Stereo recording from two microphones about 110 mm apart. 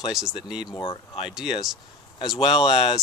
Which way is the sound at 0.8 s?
55° left (ahead or behind).